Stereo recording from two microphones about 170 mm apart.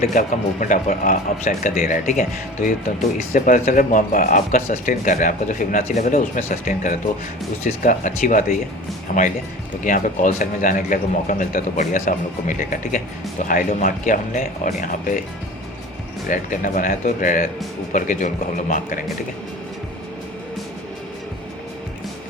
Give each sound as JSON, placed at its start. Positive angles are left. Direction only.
{"t": 0.0, "sound": "speech", "side_deg": 50}
{"t": 3.3, "sound": "speech", "side_deg": 50}
{"t": 16.3, "sound": "speech", "side_deg": 50}